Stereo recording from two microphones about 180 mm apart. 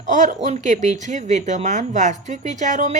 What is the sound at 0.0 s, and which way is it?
A woman's voice, 45° right (ahead or behind).